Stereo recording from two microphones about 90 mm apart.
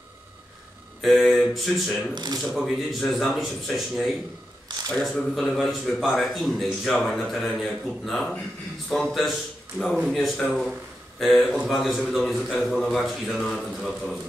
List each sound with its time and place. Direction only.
1.0 s a man's voice: centre (ahead or behind)
2.1 s speech: 50° right (ahead or behind)
2.5 s a man's voice: 5° right (ahead or behind)
5.1 s a man's voice: 5° left (ahead or behind)